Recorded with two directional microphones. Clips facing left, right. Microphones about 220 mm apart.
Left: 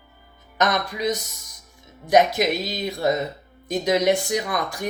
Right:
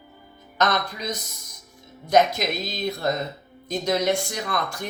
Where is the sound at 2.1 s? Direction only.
15° left (ahead or behind).